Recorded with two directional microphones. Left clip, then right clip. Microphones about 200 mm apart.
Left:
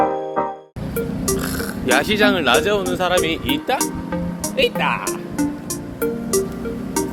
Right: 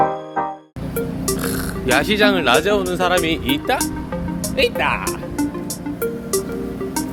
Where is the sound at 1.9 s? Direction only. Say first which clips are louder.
Even; 10° right (ahead or behind); by 4.9 s 25° right (ahead or behind).